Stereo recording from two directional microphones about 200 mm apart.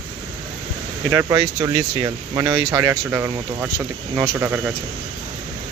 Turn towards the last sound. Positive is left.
turn(degrees=-10)  # may be behind; listen again after turning